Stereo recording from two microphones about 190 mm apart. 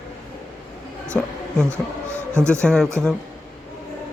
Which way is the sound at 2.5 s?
5° left (ahead or behind).